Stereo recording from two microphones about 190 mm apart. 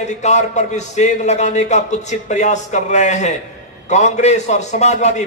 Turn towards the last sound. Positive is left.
turn(degrees=40)  # may be behind; listen again after turning